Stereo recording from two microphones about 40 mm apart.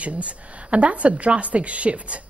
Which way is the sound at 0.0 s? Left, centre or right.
Right.